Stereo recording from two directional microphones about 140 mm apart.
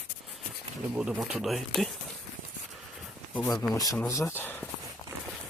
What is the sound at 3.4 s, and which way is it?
Speech, 20° left (ahead or behind).